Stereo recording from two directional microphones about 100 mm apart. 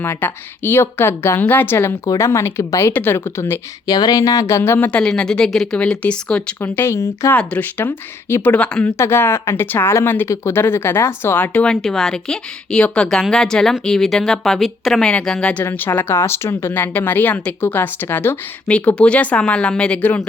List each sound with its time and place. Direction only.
0.0 s speech: 25° left (ahead or behind)
3.8 s speech: 40° left (ahead or behind); by 6.4 s 10° left (ahead or behind)
6.6 s speech: 25° left (ahead or behind)
7.3 s speech: 15° left (ahead or behind)
8.5 s speech: 10° left (ahead or behind)
9.0 s speech: 25° left (ahead or behind)
15.6 s speech: 25° left (ahead or behind)